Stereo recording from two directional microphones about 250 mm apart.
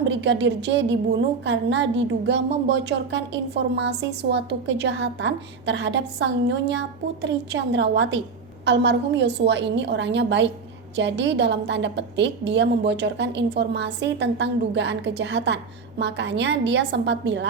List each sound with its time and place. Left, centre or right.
0.1 s a woman's voice: right